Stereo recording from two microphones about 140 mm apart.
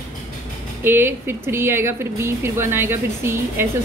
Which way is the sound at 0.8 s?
15° right (ahead or behind).